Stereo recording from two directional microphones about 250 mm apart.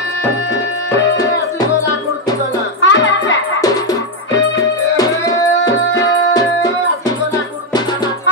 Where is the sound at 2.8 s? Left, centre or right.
Left.